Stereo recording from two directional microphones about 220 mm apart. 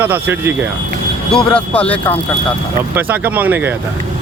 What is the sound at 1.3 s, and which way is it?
Speech, 5° left (ahead or behind).